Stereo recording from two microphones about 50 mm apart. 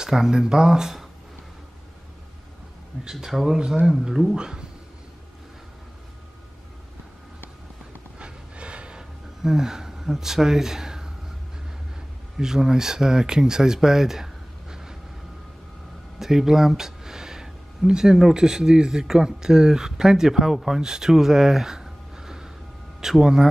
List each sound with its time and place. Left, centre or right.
0.0 s speech: centre
3.0 s speech: centre
4.4 s speech: centre
8.2 s a sound: right
9.4 s speech: centre
12.4 s speech: centre
16.2 s a man's voice: centre